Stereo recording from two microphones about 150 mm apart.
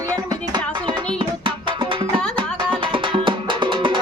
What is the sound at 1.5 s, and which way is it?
Music, 35° right (ahead or behind).